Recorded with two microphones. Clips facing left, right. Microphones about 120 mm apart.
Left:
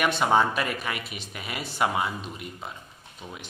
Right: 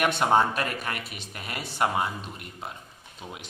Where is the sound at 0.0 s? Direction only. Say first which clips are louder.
Even; centre (ahead or behind).